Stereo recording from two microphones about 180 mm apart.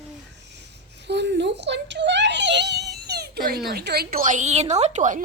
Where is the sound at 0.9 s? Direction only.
70° right (ahead or behind).